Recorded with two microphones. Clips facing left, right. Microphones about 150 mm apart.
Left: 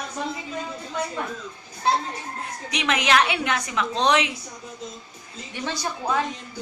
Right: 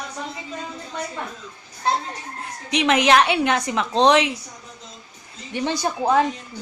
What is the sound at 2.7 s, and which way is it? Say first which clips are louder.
A woman's voice: right 6 dB; 30° right (ahead or behind).